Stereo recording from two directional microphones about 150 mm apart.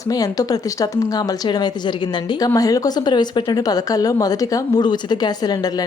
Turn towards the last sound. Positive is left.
turn(degrees=25)  # may be behind; listen again after turning